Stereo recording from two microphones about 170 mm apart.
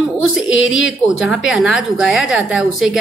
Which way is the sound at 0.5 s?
90° left.